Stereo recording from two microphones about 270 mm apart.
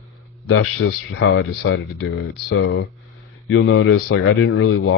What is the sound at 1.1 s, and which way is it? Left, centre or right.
Speech, left.